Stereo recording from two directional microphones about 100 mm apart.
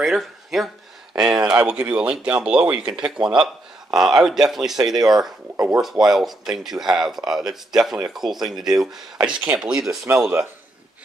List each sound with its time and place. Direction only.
0.0 s speech: 5° right (ahead or behind)
10.1 s speech: 25° right (ahead or behind)